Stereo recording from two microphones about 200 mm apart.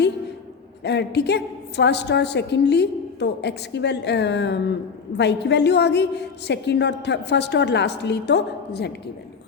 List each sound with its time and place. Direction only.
0.9 s a woman's voice: 60° left (ahead or behind)